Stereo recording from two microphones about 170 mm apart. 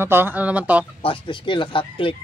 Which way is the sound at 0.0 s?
15° right (ahead or behind).